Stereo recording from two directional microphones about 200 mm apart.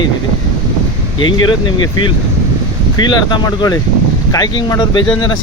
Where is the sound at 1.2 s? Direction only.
25° left (ahead or behind).